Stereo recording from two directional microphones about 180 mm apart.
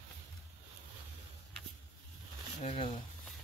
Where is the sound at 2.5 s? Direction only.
35° left (ahead or behind).